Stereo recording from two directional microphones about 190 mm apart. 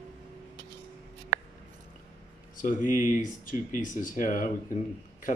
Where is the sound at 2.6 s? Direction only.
45° left (ahead or behind).